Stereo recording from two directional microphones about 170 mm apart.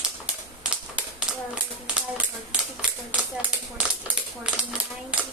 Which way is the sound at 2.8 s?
5° right (ahead or behind).